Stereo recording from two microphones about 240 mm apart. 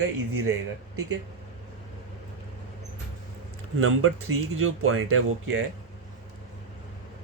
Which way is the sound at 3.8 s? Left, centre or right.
Right.